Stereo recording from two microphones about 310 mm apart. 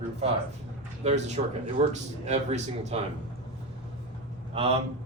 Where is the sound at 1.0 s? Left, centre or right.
Right.